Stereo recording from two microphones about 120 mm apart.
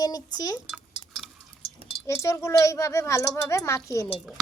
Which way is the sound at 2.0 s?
25° left (ahead or behind).